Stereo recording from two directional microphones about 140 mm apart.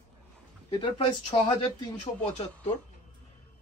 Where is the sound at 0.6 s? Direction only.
35° left (ahead or behind).